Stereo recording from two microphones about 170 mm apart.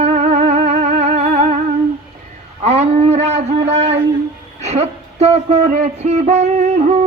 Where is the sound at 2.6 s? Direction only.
40° right (ahead or behind).